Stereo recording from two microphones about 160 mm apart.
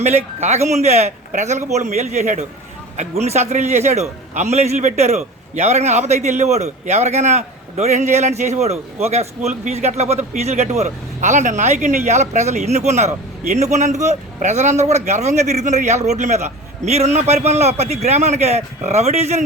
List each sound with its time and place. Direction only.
0.0 s a man's voice: 45° right (ahead or behind)